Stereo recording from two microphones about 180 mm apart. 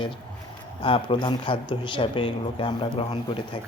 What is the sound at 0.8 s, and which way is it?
Speech, 30° left (ahead or behind).